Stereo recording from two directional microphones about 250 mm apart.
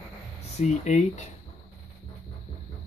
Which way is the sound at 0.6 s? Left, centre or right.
Left.